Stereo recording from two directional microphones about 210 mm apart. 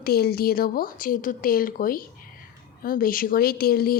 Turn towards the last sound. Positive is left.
turn(degrees=45)  # may be behind; listen again after turning